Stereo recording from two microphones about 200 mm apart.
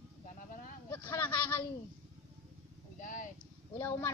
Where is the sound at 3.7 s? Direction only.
15° left (ahead or behind).